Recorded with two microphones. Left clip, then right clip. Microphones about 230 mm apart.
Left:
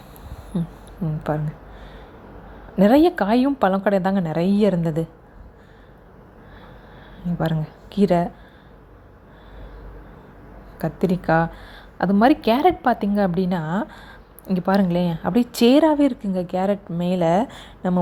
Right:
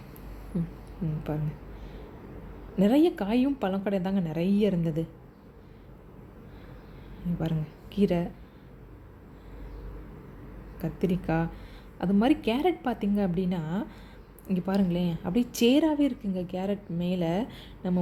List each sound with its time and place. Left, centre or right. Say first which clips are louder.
1.3 s speech: left 10 dB; left
2.7 s speech: left 8 dB; left
7.3 s a woman's voice: left 10 dB; left
11.0 s speech: left 10 dB; left